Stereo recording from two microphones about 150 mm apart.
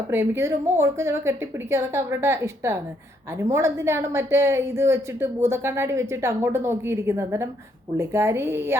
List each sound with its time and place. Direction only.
0.1 s a woman's voice: 15° right (ahead or behind)